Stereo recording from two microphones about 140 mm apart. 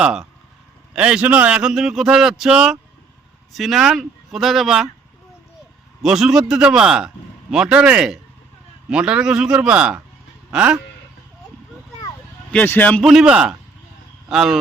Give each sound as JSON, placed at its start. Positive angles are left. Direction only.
{"t": 0.0, "sound": "a man's voice", "side_deg": -5}
{"t": 6.0, "sound": "a man's voice", "side_deg": -5}
{"t": 12.5, "sound": "a man's voice", "side_deg": 10}
{"t": 13.0, "sound": "speech", "side_deg": 0}